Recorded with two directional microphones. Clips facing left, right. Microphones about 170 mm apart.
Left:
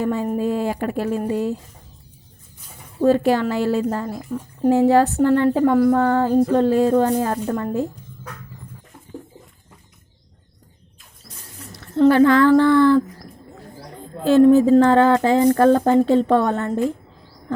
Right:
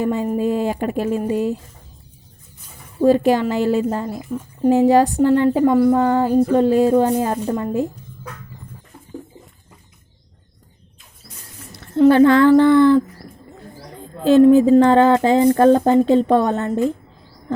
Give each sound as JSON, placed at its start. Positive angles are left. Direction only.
{"t": 0.0, "sound": "a woman's voice", "side_deg": -20}
{"t": 3.0, "sound": "a woman's voice", "side_deg": -15}
{"t": 4.2, "sound": "speech", "side_deg": -5}
{"t": 4.7, "sound": "a woman's voice", "side_deg": -15}
{"t": 12.0, "sound": "speech", "side_deg": -25}
{"t": 14.3, "sound": "speech", "side_deg": -20}